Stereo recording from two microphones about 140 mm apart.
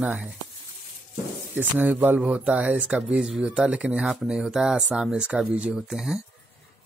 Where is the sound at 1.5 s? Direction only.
10° right (ahead or behind).